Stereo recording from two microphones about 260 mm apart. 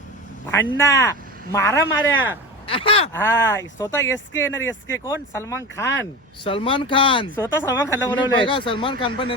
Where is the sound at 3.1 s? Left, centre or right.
Centre.